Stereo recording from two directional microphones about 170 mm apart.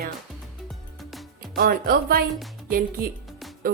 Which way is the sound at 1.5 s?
60° right (ahead or behind).